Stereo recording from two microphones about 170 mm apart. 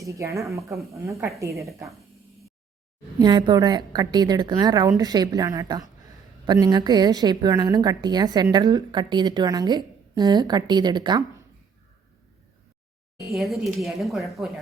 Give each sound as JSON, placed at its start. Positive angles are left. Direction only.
{"t": 0.0, "sound": "speech", "side_deg": -15}
{"t": 3.2, "sound": "a woman's voice", "side_deg": -25}
{"t": 13.2, "sound": "speech", "side_deg": 0}